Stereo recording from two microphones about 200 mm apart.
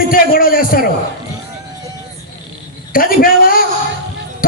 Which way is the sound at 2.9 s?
45° left (ahead or behind).